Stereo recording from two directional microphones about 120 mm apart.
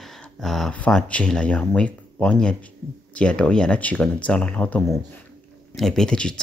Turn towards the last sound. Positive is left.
turn(degrees=5)  # may be behind; listen again after turning